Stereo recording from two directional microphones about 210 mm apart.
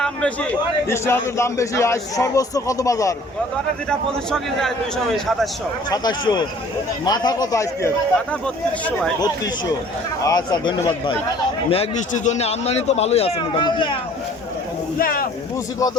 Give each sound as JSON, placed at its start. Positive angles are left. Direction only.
{"t": 0.0, "sound": "a sound", "side_deg": 5}
{"t": 0.9, "sound": "a man's voice", "side_deg": 15}
{"t": 3.8, "sound": "a man's voice", "side_deg": 0}
{"t": 5.9, "sound": "a man's voice", "side_deg": 20}
{"t": 9.2, "sound": "a man's voice", "side_deg": 15}
{"t": 14.9, "sound": "a sound", "side_deg": 45}